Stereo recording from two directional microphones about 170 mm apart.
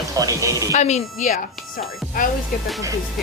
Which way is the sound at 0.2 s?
20° right (ahead or behind).